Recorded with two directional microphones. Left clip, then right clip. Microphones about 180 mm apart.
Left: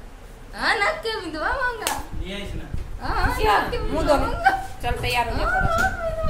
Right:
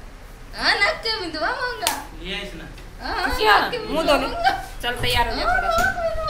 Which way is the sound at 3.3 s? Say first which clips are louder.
Right 4 dB; 15° right (ahead or behind).